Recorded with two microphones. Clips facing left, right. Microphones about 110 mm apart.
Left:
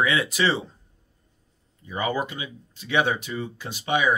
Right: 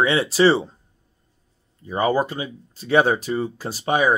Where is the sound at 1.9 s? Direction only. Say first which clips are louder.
Right 6 dB; 35° right (ahead or behind).